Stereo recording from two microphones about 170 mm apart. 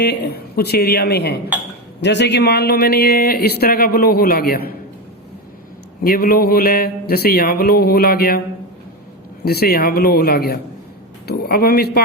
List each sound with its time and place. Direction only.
0.0 s a woman's voice: 70° left (ahead or behind)
2.0 s speech: 90° left; by 4.7 s 65° left (ahead or behind)
6.0 s speech: 60° left (ahead or behind)
9.4 s speech: 65° left (ahead or behind)